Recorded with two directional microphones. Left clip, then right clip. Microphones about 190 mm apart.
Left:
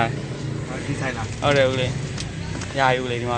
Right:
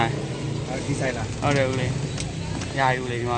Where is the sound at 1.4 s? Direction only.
Centre (ahead or behind).